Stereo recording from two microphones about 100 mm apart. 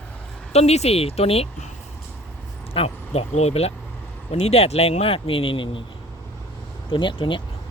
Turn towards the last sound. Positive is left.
turn(degrees=55)  # may be behind; listen again after turning